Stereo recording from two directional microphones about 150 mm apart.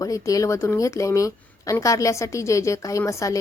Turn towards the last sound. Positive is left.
turn(degrees=20)  # may be behind; listen again after turning